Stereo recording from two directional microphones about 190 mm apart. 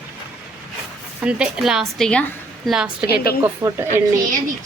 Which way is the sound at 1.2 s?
5° right (ahead or behind).